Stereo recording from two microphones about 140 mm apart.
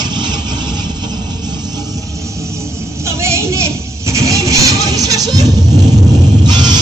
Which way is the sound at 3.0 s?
20° right (ahead or behind).